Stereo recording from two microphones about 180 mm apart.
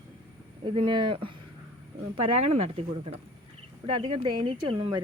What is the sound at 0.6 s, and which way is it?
Speech, 25° right (ahead or behind).